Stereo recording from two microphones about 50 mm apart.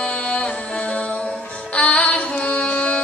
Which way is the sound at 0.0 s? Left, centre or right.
Centre.